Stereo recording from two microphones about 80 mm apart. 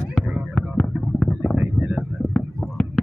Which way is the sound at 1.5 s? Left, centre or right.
Centre.